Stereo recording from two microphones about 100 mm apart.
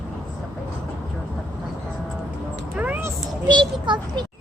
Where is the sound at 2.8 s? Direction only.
15° right (ahead or behind).